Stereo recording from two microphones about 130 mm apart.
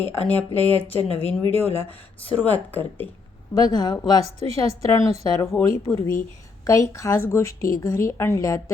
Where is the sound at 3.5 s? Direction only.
30° left (ahead or behind).